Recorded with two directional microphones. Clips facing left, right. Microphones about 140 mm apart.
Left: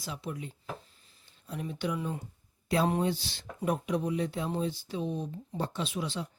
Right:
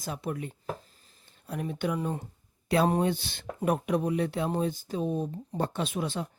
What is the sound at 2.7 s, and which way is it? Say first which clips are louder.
Speech: right 3 dB; 65° right (ahead or behind).